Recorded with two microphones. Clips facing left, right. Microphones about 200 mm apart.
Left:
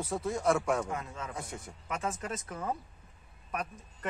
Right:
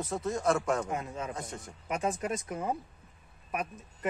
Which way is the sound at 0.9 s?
20° right (ahead or behind).